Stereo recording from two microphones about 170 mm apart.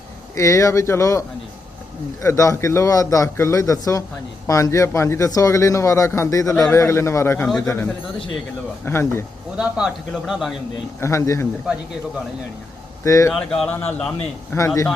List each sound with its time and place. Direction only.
0.3 s a man's voice: 20° left (ahead or behind)
2.2 s a man's voice: 20° left (ahead or behind)
9.6 s speech: 5° right (ahead or behind)
11.0 s a man's voice: 15° left (ahead or behind)
13.1 s a man's voice: 20° left (ahead or behind)
13.3 s a man's voice: centre (ahead or behind)